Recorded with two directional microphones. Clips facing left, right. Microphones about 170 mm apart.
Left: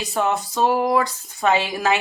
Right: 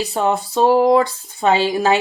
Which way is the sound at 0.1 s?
30° right (ahead or behind).